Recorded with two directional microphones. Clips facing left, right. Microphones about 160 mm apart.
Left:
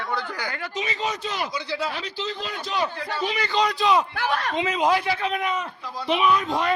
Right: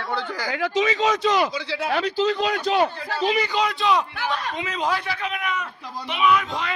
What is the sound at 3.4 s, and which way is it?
Speech, 5° right (ahead or behind).